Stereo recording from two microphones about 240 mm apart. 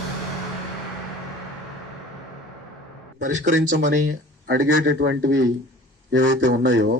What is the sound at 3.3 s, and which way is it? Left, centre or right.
Speech, right.